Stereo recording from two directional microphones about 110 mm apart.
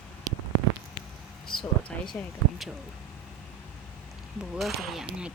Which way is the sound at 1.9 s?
10° left (ahead or behind).